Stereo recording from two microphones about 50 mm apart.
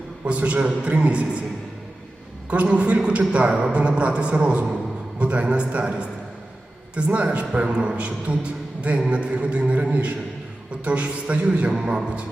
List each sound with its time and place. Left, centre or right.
0.3 s a man's voice: right
2.5 s a man's voice: right